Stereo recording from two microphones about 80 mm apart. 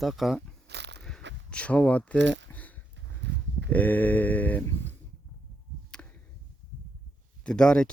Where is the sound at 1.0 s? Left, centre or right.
Centre.